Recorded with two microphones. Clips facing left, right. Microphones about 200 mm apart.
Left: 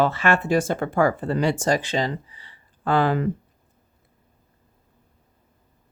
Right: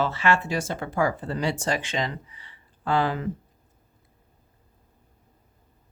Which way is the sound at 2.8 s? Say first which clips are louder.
Left 4 dB; 55° left (ahead or behind).